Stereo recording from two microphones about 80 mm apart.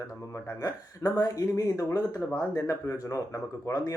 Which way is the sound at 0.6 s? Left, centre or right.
Left.